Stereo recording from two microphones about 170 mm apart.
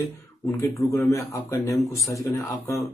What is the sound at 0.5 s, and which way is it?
Speech, 15° left (ahead or behind).